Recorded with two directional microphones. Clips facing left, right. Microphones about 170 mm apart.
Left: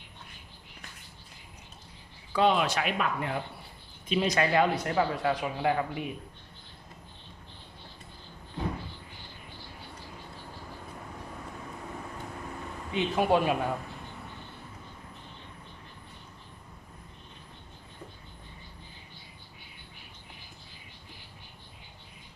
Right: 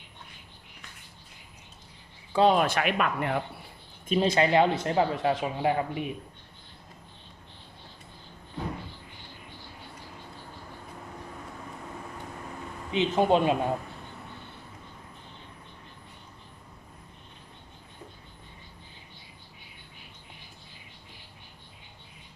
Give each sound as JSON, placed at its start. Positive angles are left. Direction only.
{"t": 2.3, "sound": "speech", "side_deg": -35}
{"t": 2.6, "sound": "speech", "side_deg": -60}
{"t": 4.1, "sound": "speech", "side_deg": -30}
{"t": 12.9, "sound": "speech", "side_deg": -20}